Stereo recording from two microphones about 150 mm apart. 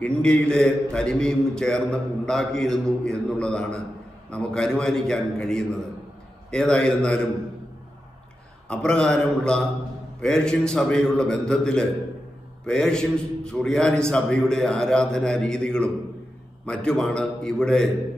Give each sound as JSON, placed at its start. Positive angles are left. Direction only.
{"t": 0.0, "sound": "a man's voice", "side_deg": 5}
{"t": 8.6, "sound": "a man's voice", "side_deg": 5}